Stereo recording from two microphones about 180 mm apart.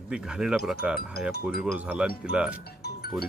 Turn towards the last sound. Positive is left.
turn(degrees=60)  # may be behind; listen again after turning